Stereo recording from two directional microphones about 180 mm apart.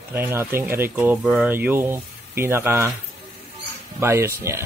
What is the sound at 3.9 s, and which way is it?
Speech, 15° right (ahead or behind).